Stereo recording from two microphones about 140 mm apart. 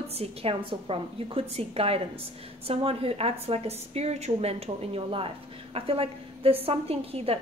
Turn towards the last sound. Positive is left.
turn(degrees=-45)  # may be behind; listen again after turning